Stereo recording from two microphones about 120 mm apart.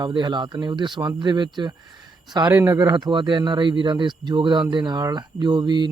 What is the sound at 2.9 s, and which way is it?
Speech, 35° right (ahead or behind).